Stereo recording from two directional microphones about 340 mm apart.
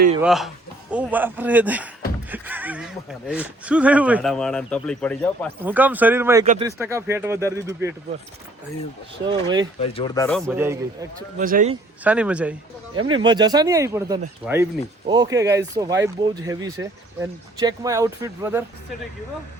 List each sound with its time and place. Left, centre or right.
0.2 s a man's voice: centre
6.4 s speech: right
6.7 s speech: centre
9.8 s speech: centre
10.2 s speech: centre
11.3 s speech: right
12.0 s speech: centre